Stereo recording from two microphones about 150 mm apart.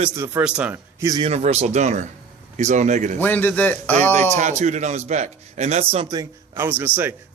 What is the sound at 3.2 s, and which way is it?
Speech, 10° left (ahead or behind).